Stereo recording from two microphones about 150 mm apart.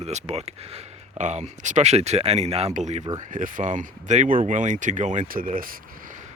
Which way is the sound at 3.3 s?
60° right (ahead or behind).